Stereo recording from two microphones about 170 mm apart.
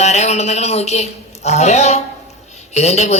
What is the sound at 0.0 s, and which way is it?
A man's voice, 40° left (ahead or behind).